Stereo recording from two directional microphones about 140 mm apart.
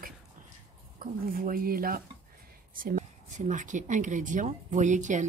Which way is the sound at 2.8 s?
70° right (ahead or behind).